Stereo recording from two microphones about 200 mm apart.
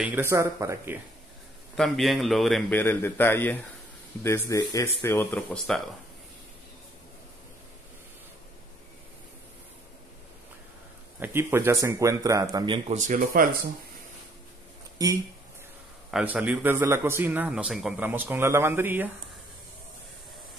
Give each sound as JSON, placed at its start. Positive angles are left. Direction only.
{"t": 0.0, "sound": "a man's voice", "side_deg": -10}
{"t": 1.8, "sound": "a man's voice", "side_deg": 0}
{"t": 11.1, "sound": "a man's voice", "side_deg": -10}
{"t": 12.9, "sound": "speech", "side_deg": -40}
{"t": 15.0, "sound": "speech", "side_deg": -20}
{"t": 16.1, "sound": "a man's voice", "side_deg": -5}